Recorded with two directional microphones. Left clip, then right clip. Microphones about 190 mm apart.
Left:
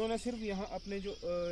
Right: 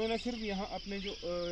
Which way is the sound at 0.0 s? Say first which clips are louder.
Right 1 dB; 20° left (ahead or behind).